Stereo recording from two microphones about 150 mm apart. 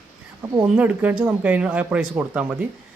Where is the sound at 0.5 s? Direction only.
10° right (ahead or behind).